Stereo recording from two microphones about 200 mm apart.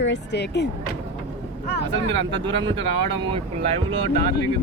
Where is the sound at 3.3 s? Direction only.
25° right (ahead or behind).